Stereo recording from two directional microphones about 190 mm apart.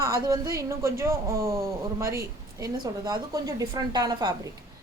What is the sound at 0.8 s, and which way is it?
A woman's voice, 15° right (ahead or behind).